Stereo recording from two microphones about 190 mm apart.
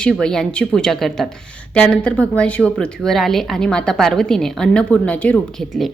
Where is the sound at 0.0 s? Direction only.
5° left (ahead or behind).